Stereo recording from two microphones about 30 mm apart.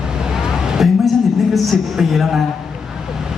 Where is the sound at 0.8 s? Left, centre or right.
Centre.